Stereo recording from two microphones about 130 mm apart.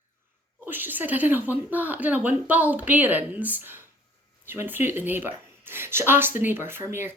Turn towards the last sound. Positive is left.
turn(degrees=-20)  # may be behind; listen again after turning